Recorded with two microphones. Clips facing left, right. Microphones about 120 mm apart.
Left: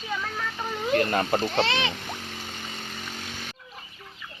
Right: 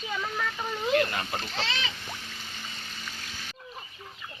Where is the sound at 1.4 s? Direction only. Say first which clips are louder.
Left 9 dB; 65° left (ahead or behind).